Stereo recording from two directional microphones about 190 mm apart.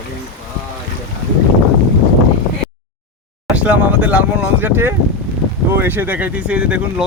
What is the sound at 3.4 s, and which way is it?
Speech, 5° right (ahead or behind).